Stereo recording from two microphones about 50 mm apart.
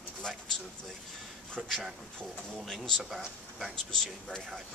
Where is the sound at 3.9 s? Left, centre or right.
Centre.